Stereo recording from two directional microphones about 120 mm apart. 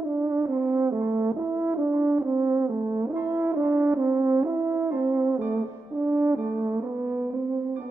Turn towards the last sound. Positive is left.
turn(degrees=-20)  # may be behind; listen again after turning